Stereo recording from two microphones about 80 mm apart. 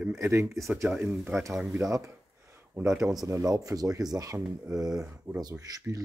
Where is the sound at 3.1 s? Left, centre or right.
Right.